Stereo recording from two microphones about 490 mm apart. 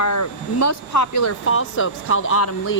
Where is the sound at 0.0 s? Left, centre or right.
Left.